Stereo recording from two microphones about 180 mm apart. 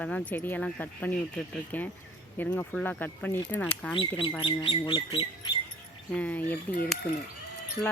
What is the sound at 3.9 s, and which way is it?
Speech, 30° left (ahead or behind).